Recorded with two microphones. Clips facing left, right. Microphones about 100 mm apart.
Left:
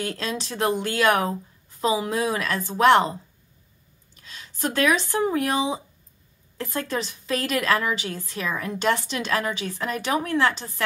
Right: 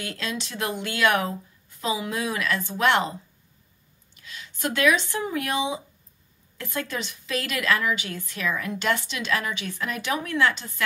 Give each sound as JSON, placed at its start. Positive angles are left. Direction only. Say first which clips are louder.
{"t": 0.0, "sound": "a woman's voice", "louder": "left 3 dB", "side_deg": 35}
{"t": 4.1, "sound": "a woman's voice", "louder": "right 1 dB", "side_deg": 35}